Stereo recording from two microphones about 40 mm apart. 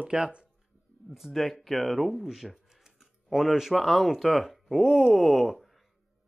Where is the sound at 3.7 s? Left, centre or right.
Centre.